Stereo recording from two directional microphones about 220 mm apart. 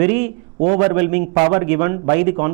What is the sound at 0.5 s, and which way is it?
Speech, 35° right (ahead or behind).